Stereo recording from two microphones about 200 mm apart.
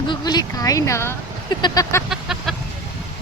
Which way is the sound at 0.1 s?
20° left (ahead or behind).